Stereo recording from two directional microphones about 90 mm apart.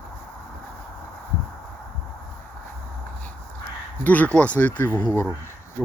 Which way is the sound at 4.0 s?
15° left (ahead or behind).